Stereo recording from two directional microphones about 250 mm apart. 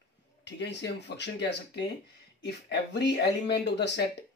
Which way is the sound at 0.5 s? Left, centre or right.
Left.